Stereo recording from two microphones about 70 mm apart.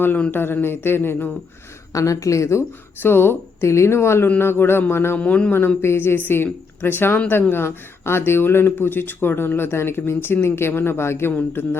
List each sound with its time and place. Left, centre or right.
0.3 s speech: left
1.9 s speech: left
3.0 s speech: left
5.1 s speech: centre